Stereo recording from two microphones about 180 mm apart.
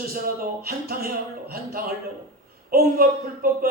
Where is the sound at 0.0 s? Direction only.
55° right (ahead or behind).